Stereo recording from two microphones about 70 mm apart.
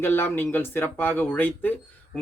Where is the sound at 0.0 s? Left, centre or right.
Left.